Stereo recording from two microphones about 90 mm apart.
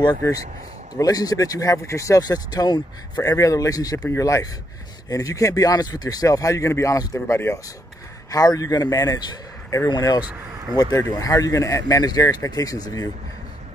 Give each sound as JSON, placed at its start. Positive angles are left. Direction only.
{"t": 0.9, "sound": "speech", "side_deg": 40}
{"t": 7.2, "sound": "speech", "side_deg": 25}
{"t": 8.3, "sound": "speech", "side_deg": 40}